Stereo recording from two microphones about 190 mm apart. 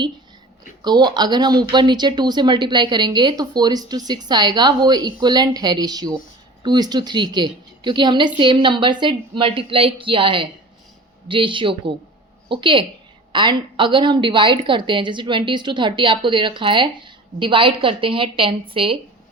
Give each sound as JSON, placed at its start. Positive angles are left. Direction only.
{"t": 0.9, "sound": "a woman's voice", "side_deg": -20}